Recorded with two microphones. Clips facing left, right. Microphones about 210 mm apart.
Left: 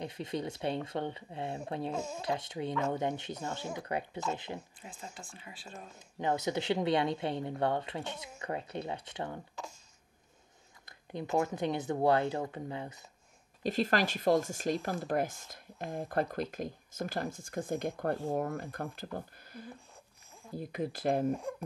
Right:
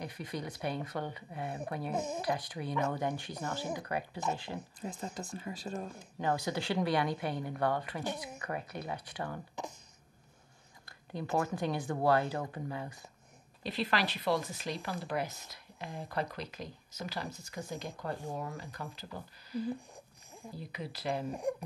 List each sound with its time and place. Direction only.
0.0 s speech: 25° left (ahead or behind)
1.9 s speech: 20° right (ahead or behind)
2.2 s speech: 25° left (ahead or behind)
4.7 s speech: 40° right (ahead or behind)
5.9 s speech: 20° left (ahead or behind)
10.9 s speech: 20° left (ahead or behind)
13.6 s speech: 45° left (ahead or behind)
21.4 s speech: 15° right (ahead or behind)